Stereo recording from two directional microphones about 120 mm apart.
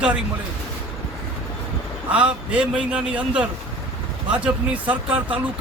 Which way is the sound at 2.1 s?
10° right (ahead or behind).